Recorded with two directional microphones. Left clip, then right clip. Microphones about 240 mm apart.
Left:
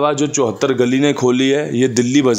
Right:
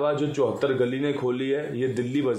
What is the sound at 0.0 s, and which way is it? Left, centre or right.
Speech, left.